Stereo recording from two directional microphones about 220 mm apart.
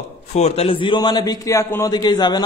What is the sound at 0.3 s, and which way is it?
Speech, 30° left (ahead or behind).